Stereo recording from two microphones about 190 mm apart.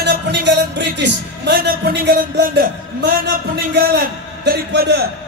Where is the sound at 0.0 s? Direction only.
65° right (ahead or behind).